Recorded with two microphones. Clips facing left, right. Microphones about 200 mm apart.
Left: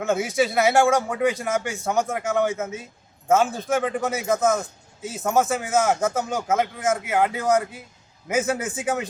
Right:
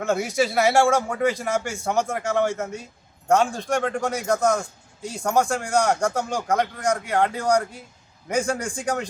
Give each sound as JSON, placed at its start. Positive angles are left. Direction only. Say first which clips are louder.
{"t": 0.0, "sound": "a man's voice", "louder": "even", "side_deg": 0}